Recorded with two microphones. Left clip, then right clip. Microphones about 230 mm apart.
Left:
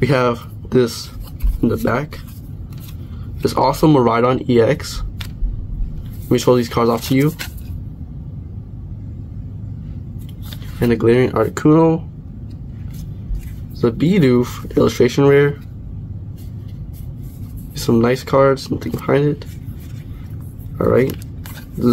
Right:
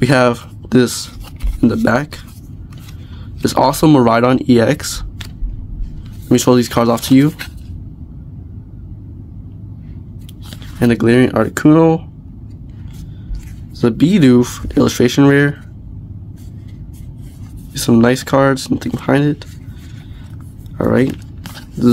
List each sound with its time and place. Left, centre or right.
0.0 s speech: right
3.4 s speech: right
6.2 s speech: right
10.8 s speech: right
13.7 s speech: right
17.7 s speech: right
20.7 s speech: right